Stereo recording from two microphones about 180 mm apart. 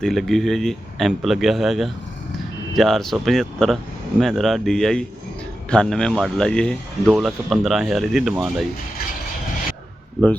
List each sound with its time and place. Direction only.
0.0 s speech: centre (ahead or behind)